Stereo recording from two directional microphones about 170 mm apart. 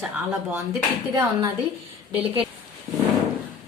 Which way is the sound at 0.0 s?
5° right (ahead or behind).